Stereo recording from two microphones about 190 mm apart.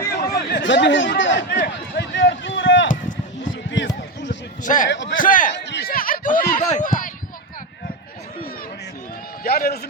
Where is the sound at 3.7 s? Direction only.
70° left (ahead or behind).